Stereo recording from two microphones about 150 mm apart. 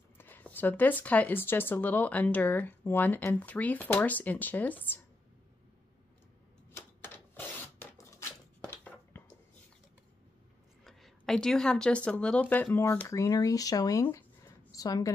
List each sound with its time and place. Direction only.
0.2 s speech: 10° left (ahead or behind)
6.7 s a sound: 15° left (ahead or behind)
10.8 s a woman's voice: centre (ahead or behind); by 15.0 s 25° left (ahead or behind)